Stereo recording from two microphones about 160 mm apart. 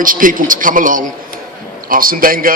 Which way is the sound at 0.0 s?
60° right (ahead or behind).